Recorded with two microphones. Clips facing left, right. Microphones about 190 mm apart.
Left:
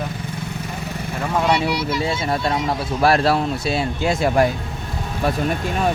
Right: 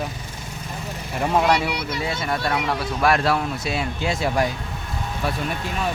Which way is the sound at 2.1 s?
25° left (ahead or behind).